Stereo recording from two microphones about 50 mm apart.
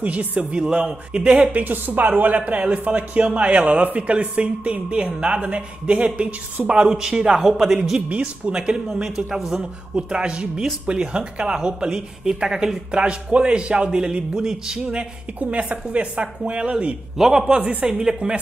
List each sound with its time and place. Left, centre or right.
0.0 s speech: right
1.5 s speech: right; by 8.0 s centre
8.1 s speech: right; by 9.7 s centre
9.9 s speech: centre
15.5 s speech: right
17.2 s speech: centre
17.5 s speech: right